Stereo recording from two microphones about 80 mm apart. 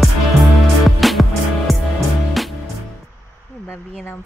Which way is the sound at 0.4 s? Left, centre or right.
Centre.